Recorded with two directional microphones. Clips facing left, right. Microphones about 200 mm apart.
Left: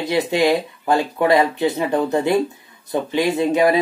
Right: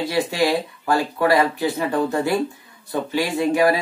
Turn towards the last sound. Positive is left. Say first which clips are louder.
# left 2 dB
turn(degrees=20)  # may be behind; listen again after turning